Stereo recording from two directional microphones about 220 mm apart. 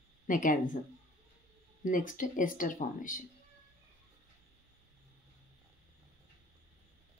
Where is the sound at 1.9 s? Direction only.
35° left (ahead or behind).